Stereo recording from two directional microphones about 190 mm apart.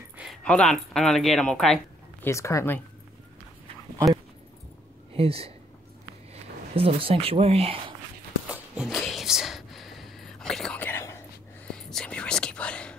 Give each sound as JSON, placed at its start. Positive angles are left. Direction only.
{"t": 0.2, "sound": "speech", "side_deg": 5}
{"t": 2.2, "sound": "speech", "side_deg": 15}
{"t": 5.1, "sound": "speech", "side_deg": -30}
{"t": 6.7, "sound": "speech", "side_deg": -30}
{"t": 8.5, "sound": "a sound", "side_deg": -5}
{"t": 11.6, "sound": "whispering", "side_deg": 5}